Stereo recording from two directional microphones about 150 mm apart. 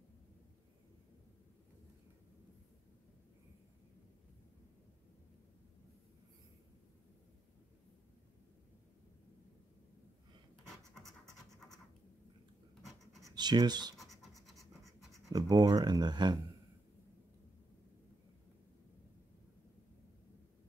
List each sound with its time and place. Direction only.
12.8 s a sound: centre (ahead or behind)
13.2 s speech: 30° right (ahead or behind)
13.9 s scratch: centre (ahead or behind)
15.3 s speech: 25° right (ahead or behind)